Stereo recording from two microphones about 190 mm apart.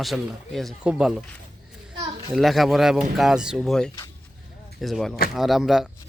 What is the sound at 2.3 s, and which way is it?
A man's voice, centre (ahead or behind).